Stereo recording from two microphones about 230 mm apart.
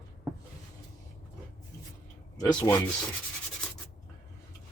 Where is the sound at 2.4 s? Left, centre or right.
Centre.